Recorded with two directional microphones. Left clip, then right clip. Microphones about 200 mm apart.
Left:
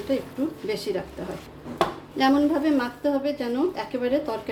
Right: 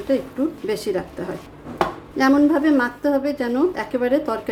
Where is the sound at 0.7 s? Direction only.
25° right (ahead or behind).